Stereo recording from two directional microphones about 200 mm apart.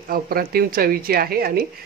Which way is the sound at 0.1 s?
50° right (ahead or behind).